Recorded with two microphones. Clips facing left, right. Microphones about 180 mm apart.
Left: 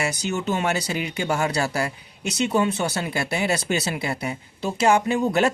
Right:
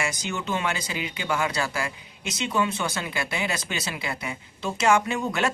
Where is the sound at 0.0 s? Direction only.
40° left (ahead or behind).